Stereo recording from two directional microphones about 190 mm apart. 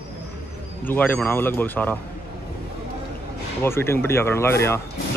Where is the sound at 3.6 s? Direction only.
15° left (ahead or behind).